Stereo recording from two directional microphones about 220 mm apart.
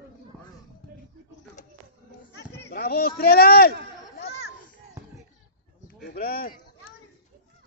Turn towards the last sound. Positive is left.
turn(degrees=40)  # may be behind; listen again after turning